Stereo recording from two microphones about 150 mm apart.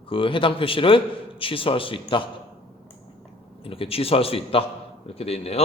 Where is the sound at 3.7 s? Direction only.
40° left (ahead or behind).